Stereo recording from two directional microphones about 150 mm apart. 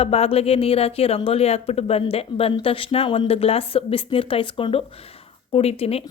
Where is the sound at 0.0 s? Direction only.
40° left (ahead or behind).